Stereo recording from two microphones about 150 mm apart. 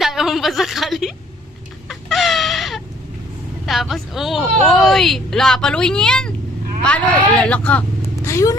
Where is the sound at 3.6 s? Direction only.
Centre (ahead or behind).